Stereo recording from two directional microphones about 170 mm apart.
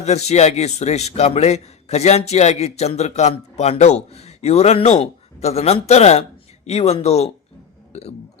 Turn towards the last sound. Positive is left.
turn(degrees=40)  # may be behind; listen again after turning